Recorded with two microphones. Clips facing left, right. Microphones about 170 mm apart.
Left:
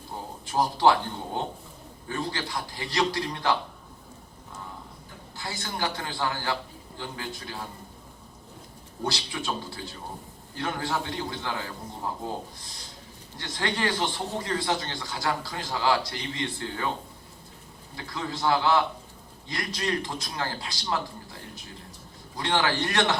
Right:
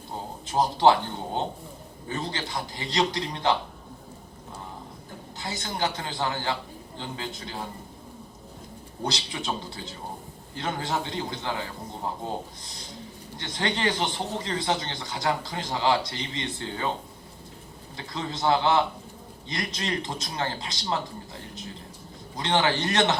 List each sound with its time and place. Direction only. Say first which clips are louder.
0.4 s speech: right 2 dB; 20° right (ahead or behind)
5.4 s speech: right 2 dB; 20° right (ahead or behind)
9.0 s speech: even; 20° right (ahead or behind)
13.4 s speech: right 1 dB; 20° right (ahead or behind)
17.9 s speech: even; 20° right (ahead or behind)
22.4 s speech: right 1 dB; 20° right (ahead or behind)